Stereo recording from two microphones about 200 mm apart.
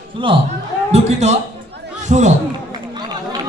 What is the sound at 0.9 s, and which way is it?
A man's voice, 35° right (ahead or behind).